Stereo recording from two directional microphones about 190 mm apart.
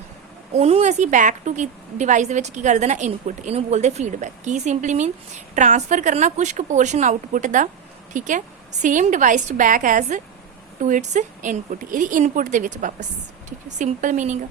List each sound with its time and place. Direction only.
0.5 s a woman's voice: 35° right (ahead or behind)